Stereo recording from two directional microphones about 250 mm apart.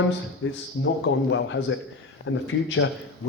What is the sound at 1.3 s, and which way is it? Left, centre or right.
Speech, left.